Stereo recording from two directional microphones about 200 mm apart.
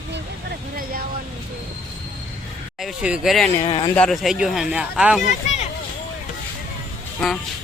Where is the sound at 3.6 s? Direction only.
25° left (ahead or behind).